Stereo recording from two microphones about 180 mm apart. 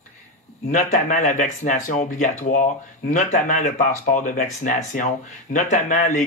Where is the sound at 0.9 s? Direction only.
45° left (ahead or behind).